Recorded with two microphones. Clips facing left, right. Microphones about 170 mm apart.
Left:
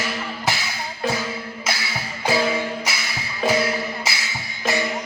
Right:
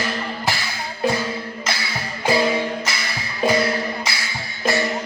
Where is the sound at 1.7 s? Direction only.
5° left (ahead or behind).